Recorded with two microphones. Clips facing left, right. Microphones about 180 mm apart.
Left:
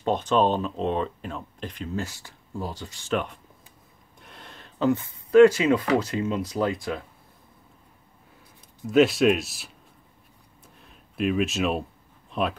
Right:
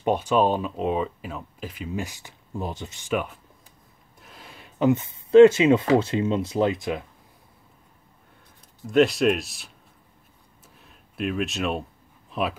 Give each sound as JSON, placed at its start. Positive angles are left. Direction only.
{"t": 0.0, "sound": "speech", "side_deg": -10}
{"t": 3.1, "sound": "speech", "side_deg": -5}
{"t": 8.8, "sound": "speech", "side_deg": 0}
{"t": 10.8, "sound": "a sound", "side_deg": 0}
{"t": 12.3, "sound": "speech", "side_deg": -5}